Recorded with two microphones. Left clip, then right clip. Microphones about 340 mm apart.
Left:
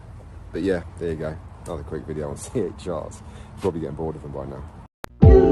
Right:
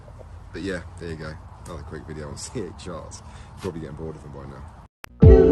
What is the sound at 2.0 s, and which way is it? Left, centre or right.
Speech, left.